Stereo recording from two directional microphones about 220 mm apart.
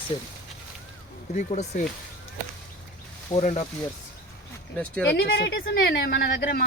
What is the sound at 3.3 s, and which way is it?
Speech, 30° left (ahead or behind).